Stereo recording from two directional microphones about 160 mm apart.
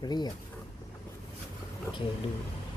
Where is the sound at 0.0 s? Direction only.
25° left (ahead or behind).